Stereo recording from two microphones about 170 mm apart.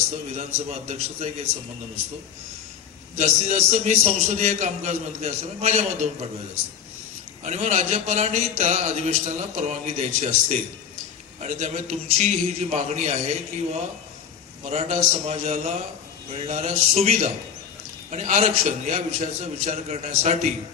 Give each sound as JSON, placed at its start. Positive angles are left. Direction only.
{"t": 0.3, "sound": "speech", "side_deg": -40}
{"t": 3.2, "sound": "speech", "side_deg": -40}
{"t": 7.4, "sound": "speech", "side_deg": -45}
{"t": 11.3, "sound": "speech", "side_deg": -40}
{"t": 14.6, "sound": "speech", "side_deg": -40}